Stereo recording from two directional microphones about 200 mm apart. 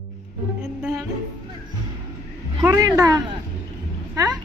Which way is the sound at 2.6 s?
15° right (ahead or behind).